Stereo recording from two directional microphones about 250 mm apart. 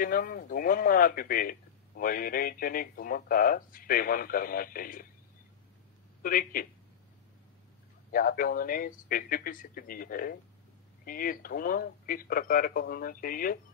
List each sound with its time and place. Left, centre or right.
0.0 s speech: left
6.2 s speech: left
8.1 s speech: left